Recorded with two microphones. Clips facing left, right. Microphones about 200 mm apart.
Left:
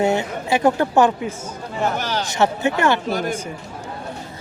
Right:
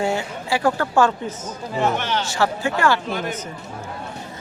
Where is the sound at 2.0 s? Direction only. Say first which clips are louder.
Even; 40° left (ahead or behind).